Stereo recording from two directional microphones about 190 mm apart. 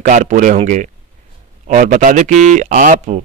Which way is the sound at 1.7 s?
40° right (ahead or behind).